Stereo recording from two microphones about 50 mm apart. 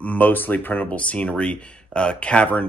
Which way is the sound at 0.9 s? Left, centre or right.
Left.